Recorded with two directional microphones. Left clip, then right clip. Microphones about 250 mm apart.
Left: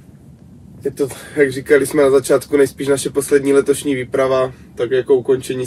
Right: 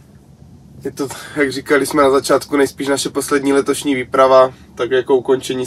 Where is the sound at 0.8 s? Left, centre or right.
Right.